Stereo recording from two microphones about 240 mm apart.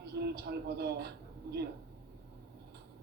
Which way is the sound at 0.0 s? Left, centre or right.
Right.